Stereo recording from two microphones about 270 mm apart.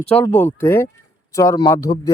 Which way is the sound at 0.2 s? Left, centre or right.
Centre.